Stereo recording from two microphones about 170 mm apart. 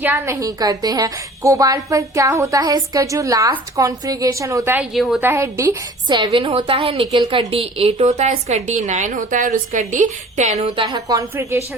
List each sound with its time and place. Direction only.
0.0 s a woman's voice: 15° right (ahead or behind)
4.8 s a woman's voice: centre (ahead or behind)
5.2 s a woman's voice: 15° right (ahead or behind); by 10.7 s 45° right (ahead or behind)
10.8 s a woman's voice: 25° right (ahead or behind)